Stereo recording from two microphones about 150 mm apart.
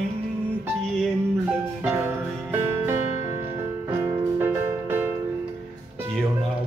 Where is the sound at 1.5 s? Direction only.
15° right (ahead or behind).